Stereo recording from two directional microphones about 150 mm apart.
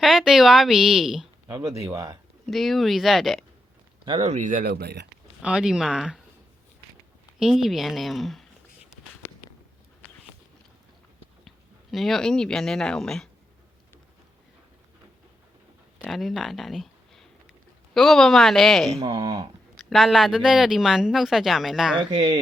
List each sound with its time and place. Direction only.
0.0 s speech: centre (ahead or behind)
1.5 s speech: 25° right (ahead or behind)
2.5 s speech: centre (ahead or behind)
4.2 s speech: 50° right (ahead or behind); by 4.9 s 90° right
5.4 s speech: 5° right (ahead or behind)
7.3 s speech: centre (ahead or behind)
11.4 s speech: centre (ahead or behind)
16.0 s speech: centre (ahead or behind)
18.9 s speech: 40° right (ahead or behind)
19.2 s speech: 25° right (ahead or behind)
19.7 s speech: centre (ahead or behind)